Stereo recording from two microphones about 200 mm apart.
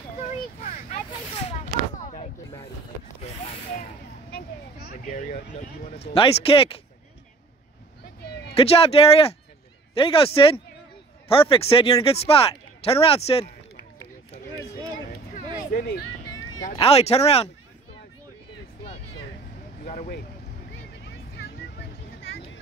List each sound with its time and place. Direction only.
0.2 s a sound: 35° left (ahead or behind)
4.3 s speech: 45° left (ahead or behind); by 6.8 s 30° left (ahead or behind)
8.5 s speech: 30° left (ahead or behind)
15.7 s speech: 50° left (ahead or behind)
16.7 s speech: 30° left (ahead or behind)
19.8 s vehicle: 45° left (ahead or behind)